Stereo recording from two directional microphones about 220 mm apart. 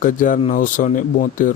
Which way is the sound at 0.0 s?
35° left (ahead or behind).